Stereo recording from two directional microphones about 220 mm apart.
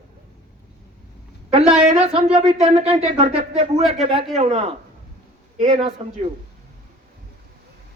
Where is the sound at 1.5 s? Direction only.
30° right (ahead or behind).